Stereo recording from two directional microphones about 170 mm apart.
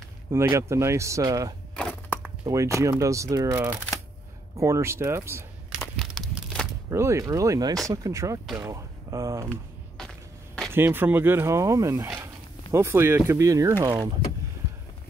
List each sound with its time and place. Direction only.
0.3 s speech: 15° right (ahead or behind)
1.8 s a sound: 10° left (ahead or behind)
2.4 s speech: 20° right (ahead or behind)
5.7 s crumpling: centre (ahead or behind)
6.9 s speech: 15° right (ahead or behind)
9.5 s a sound: 5° left (ahead or behind)
10.7 s speech: 15° right (ahead or behind)